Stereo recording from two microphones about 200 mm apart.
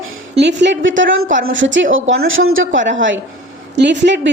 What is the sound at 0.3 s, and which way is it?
Speech, 60° right (ahead or behind).